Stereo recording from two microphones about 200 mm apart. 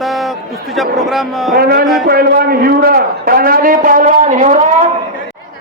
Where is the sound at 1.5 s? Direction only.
50° right (ahead or behind).